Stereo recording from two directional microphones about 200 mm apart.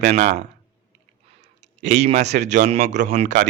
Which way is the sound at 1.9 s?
35° right (ahead or behind).